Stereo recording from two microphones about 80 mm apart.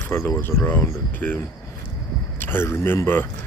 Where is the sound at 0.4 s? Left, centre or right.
Left.